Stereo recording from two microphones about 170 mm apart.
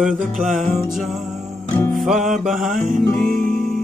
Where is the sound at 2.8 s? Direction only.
50° right (ahead or behind).